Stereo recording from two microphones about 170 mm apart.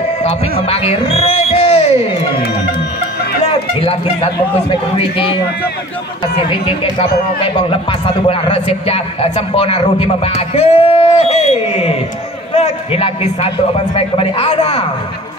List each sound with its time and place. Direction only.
0.2 s speech: 35° left (ahead or behind)
3.8 s speech: 35° left (ahead or behind)
6.6 s speech: 30° left (ahead or behind)
8.3 s speech: 35° left (ahead or behind)